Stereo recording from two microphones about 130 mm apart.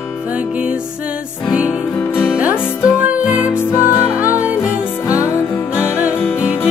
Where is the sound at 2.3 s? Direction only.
10° right (ahead or behind).